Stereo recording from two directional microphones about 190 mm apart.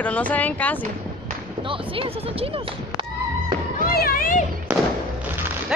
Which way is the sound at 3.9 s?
50° left (ahead or behind).